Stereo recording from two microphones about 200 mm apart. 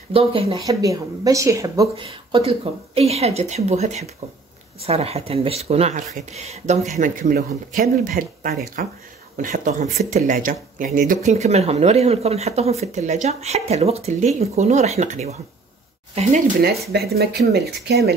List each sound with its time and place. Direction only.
0.1 s speech: 25° right (ahead or behind)
2.0 s speech: 30° right (ahead or behind)
16.9 s speech: 50° right (ahead or behind)